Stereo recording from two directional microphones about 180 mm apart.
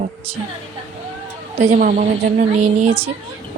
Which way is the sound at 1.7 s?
50° right (ahead or behind).